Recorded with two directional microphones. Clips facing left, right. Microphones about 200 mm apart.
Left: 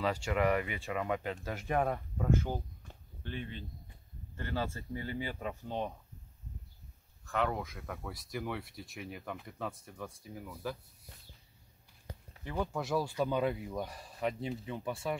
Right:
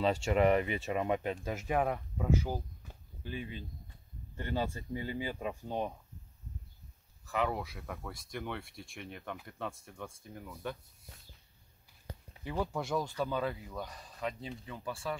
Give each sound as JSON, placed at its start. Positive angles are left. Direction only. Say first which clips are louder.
{"t": 0.0, "sound": "speech", "louder": "right 3 dB", "side_deg": -25}
{"t": 1.5, "sound": "speech", "louder": "even", "side_deg": -5}
{"t": 7.2, "sound": "speech", "louder": "even", "side_deg": -5}
{"t": 12.4, "sound": "speech", "louder": "even", "side_deg": 0}